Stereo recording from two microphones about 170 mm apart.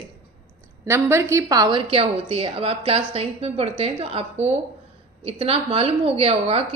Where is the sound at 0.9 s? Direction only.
15° right (ahead or behind).